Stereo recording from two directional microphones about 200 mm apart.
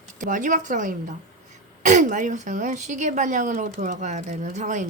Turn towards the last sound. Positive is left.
turn(degrees=-35)  # may be behind; listen again after turning